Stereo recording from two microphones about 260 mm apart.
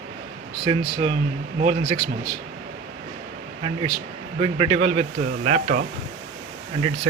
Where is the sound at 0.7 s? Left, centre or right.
Centre.